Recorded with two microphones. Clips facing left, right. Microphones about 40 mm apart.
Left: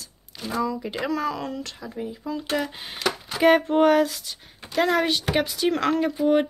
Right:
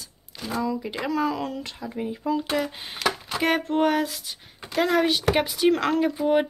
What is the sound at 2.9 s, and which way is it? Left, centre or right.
Speech, centre.